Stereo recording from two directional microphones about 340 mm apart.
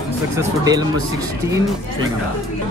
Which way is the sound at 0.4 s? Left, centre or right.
Centre.